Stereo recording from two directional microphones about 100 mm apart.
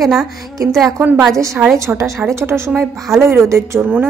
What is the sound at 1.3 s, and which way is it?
Speech, 30° right (ahead or behind).